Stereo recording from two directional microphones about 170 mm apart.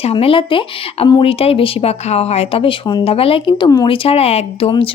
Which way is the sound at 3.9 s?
35° left (ahead or behind).